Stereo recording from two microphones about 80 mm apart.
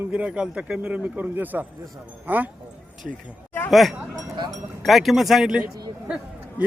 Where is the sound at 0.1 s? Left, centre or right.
Centre.